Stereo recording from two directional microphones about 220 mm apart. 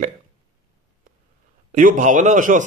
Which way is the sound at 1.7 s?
35° right (ahead or behind).